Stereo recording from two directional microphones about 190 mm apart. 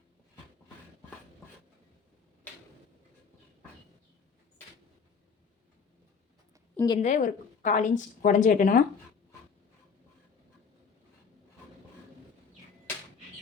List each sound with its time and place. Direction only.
6.7 s a woman's voice: 20° left (ahead or behind)
7.0 s a woman's voice: 45° left (ahead or behind)